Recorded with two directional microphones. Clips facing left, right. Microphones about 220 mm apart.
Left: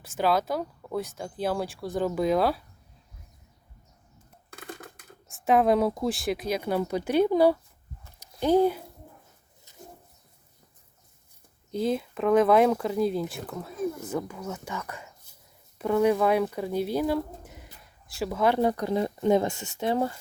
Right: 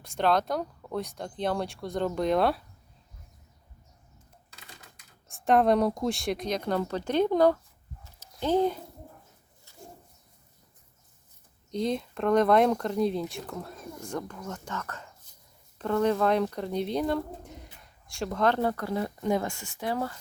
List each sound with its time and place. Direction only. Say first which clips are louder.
0.0 s speech: even; 5° left (ahead or behind)
4.5 s typewriter: left 13 dB; 55° left (ahead or behind)
5.3 s speech: left 1 dB; centre (ahead or behind)
9.7 s bird: left 2 dB; 15° left (ahead or behind)
11.7 s speech: left 2 dB; 5° left (ahead or behind); by 20.1 s 25° left (ahead or behind)